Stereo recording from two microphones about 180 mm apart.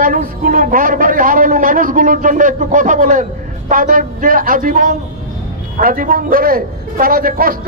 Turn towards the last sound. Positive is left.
turn(degrees=-55)  # may be behind; listen again after turning